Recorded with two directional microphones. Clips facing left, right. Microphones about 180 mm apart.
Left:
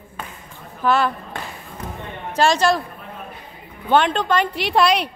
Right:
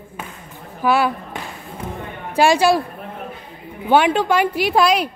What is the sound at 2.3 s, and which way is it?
Speech, 10° right (ahead or behind).